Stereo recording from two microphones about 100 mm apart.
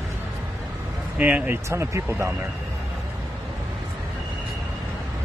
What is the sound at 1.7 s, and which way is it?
Speech, 30° right (ahead or behind).